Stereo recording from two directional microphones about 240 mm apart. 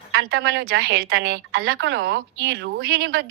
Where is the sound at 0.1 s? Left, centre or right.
Right.